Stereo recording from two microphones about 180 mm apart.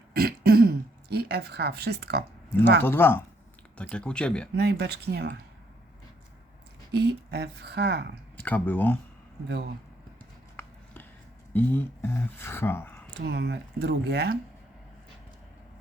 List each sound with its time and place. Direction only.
0.1 s throat clearing: 60° right (ahead or behind)
2.8 s speech: 10° left (ahead or behind)
4.5 s speech: 65° right (ahead or behind)
6.9 s speech: 65° right (ahead or behind)
8.4 s speech: 10° left (ahead or behind)
11.5 s speech: 10° left (ahead or behind)
13.1 s speech: 65° right (ahead or behind)